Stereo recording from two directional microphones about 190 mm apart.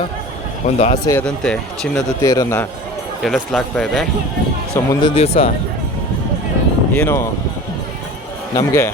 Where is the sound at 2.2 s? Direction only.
15° left (ahead or behind).